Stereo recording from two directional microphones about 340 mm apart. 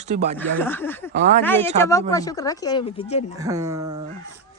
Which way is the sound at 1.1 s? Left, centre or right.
Right.